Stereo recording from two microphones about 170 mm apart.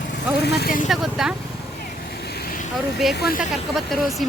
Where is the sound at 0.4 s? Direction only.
70° left (ahead or behind).